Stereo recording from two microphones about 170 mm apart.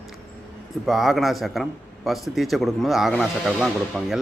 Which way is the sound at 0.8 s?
Centre (ahead or behind).